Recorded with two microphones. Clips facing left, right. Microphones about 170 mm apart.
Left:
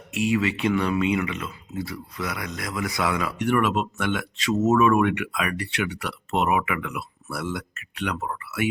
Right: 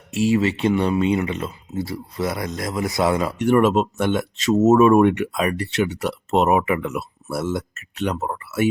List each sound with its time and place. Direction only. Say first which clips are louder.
0.1 s speech: right 4 dB; 35° right (ahead or behind)
6.0 s speech: right 6 dB; 40° right (ahead or behind)